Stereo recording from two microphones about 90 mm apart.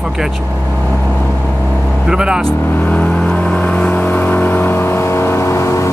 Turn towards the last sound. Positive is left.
turn(degrees=35)  # may be behind; listen again after turning